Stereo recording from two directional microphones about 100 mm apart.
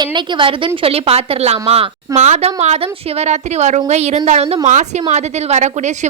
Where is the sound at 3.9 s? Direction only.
90° right.